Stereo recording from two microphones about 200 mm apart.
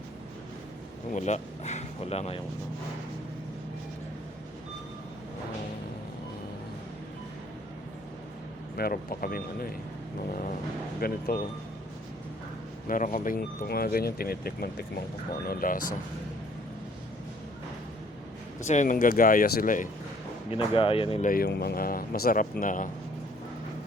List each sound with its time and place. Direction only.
1.1 s speech: 35° left (ahead or behind)
8.7 s speech: 50° left (ahead or behind)
11.0 s speech: 45° left (ahead or behind)
12.9 s speech: 40° left (ahead or behind)
18.6 s speech: 35° left (ahead or behind)
20.5 s speech: 25° left (ahead or behind)
21.2 s speech: 45° left (ahead or behind)